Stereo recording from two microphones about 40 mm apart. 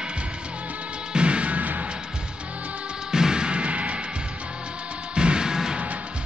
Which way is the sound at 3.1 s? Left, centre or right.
Centre.